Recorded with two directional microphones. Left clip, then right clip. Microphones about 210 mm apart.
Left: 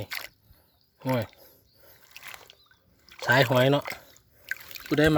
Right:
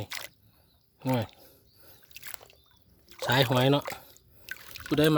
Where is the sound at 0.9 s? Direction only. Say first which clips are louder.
Left 2 dB; centre (ahead or behind).